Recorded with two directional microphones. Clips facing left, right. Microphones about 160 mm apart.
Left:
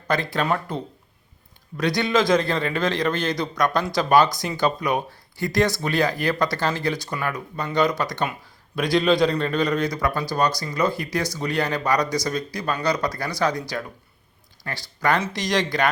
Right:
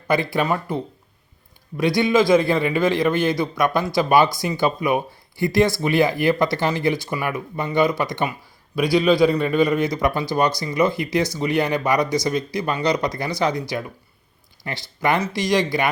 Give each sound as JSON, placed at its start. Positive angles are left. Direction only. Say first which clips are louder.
{"t": 0.3, "sound": "speech", "louder": "right 2 dB", "side_deg": -10}
{"t": 2.0, "sound": "speech", "louder": "right 4 dB", "side_deg": -10}